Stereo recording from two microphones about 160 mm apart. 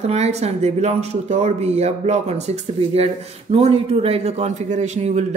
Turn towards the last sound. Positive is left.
turn(degrees=-45)  # may be behind; listen again after turning